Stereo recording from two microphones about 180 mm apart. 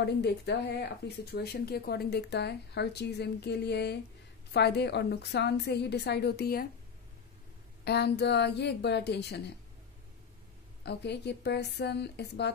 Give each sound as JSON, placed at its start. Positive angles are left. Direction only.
{"t": 0.0, "sound": "a woman's voice", "side_deg": 65}
{"t": 7.8, "sound": "speech", "side_deg": 65}
{"t": 10.8, "sound": "speech", "side_deg": 70}